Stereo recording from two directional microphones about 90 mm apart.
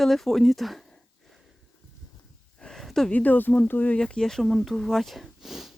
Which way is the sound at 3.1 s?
20° left (ahead or behind).